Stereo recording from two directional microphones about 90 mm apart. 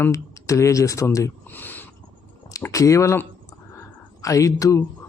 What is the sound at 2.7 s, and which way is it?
Speech, 35° left (ahead or behind).